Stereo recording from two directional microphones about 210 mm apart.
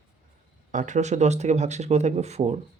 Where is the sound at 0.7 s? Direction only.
35° right (ahead or behind).